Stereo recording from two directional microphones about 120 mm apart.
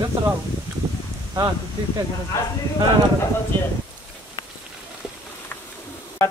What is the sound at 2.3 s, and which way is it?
Speech, 25° left (ahead or behind).